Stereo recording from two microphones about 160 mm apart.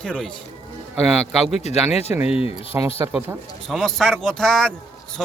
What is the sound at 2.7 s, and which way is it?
Speech, 15° right (ahead or behind).